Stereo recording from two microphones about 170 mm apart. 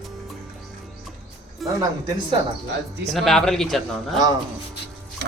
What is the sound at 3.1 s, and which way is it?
Speech, centre (ahead or behind).